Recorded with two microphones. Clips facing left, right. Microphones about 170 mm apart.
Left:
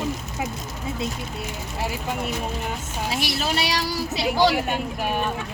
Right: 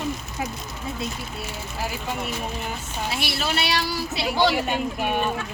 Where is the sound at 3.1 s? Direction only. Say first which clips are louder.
Left 2 dB; 40° left (ahead or behind).